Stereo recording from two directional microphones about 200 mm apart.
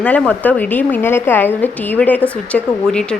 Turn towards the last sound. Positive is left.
turn(degrees=5)  # may be behind; listen again after turning